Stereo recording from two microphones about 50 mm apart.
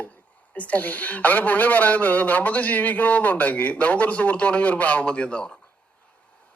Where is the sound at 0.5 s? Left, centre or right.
Left.